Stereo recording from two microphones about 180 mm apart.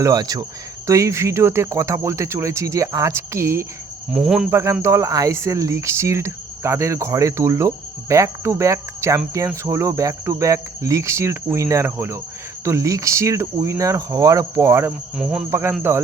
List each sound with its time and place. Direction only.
0.0 s speech: 20° right (ahead or behind)
4.1 s speech: 5° right (ahead or behind)
4.5 s speech: 15° right (ahead or behind)
15.2 s speech: 5° right (ahead or behind)
15.4 s speech: 15° right (ahead or behind)